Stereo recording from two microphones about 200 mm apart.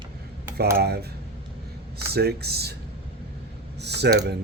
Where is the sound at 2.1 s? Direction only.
55° right (ahead or behind).